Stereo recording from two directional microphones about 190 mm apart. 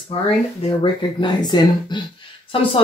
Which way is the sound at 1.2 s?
20° left (ahead or behind).